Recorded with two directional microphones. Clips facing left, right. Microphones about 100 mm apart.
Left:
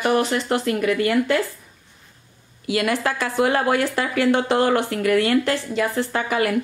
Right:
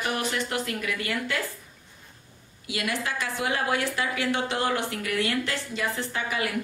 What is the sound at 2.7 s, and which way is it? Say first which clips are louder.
Speech: left 8 dB; 55° left (ahead or behind).